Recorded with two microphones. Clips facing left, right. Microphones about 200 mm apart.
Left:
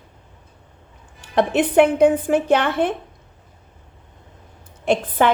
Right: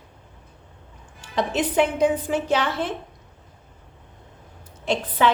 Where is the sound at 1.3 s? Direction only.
60° left (ahead or behind).